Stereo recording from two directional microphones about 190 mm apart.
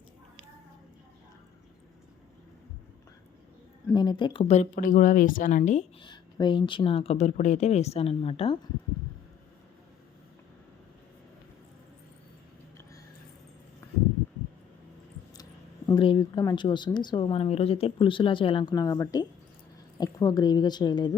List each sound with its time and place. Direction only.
3.8 s speech: 20° left (ahead or behind); by 5.8 s 40° left (ahead or behind)
6.0 s speech: 25° left (ahead or behind)
15.9 s speech: 25° left (ahead or behind)